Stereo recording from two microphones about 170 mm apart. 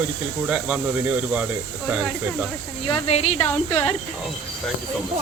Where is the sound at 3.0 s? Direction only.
35° left (ahead or behind).